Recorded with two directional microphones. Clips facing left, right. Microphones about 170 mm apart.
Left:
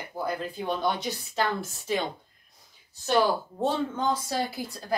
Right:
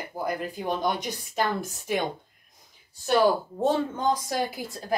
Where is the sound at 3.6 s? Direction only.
15° right (ahead or behind).